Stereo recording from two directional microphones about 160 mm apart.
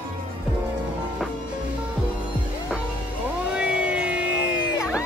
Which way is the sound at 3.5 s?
5° right (ahead or behind).